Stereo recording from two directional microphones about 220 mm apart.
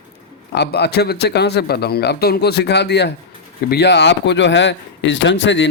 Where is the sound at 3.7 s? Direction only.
50° left (ahead or behind).